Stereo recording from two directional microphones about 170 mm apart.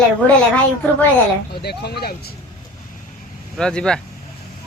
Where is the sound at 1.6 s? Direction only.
70° left (ahead or behind).